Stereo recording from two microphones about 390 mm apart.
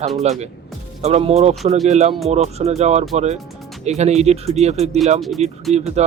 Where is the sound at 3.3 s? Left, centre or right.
Centre.